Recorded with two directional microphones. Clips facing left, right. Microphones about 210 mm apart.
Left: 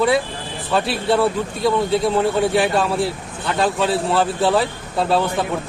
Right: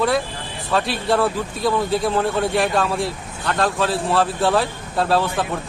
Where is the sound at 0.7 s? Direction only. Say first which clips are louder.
Left 1 dB; centre (ahead or behind).